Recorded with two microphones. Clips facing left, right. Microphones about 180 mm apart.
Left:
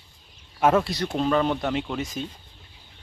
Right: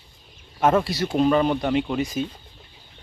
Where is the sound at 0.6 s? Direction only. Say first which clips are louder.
Right 1 dB; 5° left (ahead or behind).